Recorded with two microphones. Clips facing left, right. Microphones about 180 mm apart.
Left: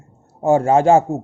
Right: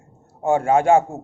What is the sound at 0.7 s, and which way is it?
Speech, 25° left (ahead or behind).